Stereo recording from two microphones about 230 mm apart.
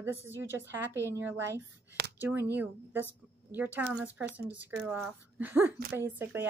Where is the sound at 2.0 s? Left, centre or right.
Right.